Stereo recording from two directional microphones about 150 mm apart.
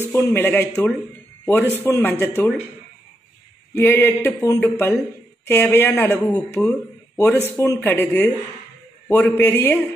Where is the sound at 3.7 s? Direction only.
15° left (ahead or behind).